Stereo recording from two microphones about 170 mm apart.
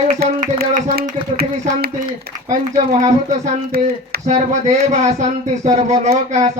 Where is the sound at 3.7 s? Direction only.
65° right (ahead or behind).